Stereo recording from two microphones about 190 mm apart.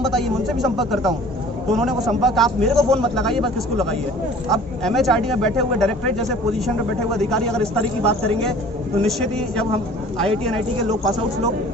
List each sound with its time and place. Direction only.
0.0 s a man's voice: centre (ahead or behind)